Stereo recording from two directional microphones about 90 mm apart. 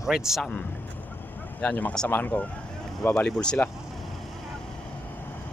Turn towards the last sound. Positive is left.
turn(degrees=0)  # may be behind; listen again after turning